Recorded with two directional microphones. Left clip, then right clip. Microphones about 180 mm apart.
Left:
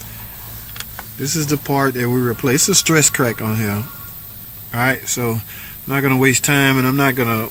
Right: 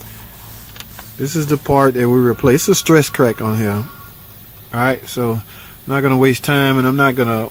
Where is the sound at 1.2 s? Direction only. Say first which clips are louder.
Right 3 dB; 35° right (ahead or behind).